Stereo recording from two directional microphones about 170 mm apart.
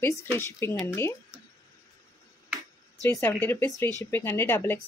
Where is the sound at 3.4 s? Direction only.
15° left (ahead or behind).